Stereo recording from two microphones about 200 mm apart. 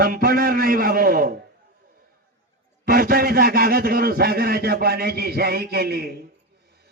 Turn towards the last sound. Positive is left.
turn(degrees=-50)  # may be behind; listen again after turning